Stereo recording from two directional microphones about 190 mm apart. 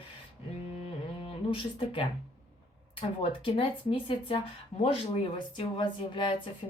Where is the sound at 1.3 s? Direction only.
25° left (ahead or behind).